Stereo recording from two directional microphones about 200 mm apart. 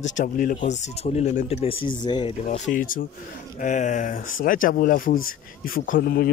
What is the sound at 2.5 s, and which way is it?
A man's voice, 40° left (ahead or behind).